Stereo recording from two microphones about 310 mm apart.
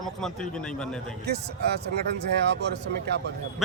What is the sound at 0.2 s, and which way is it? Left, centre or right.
Speech, centre.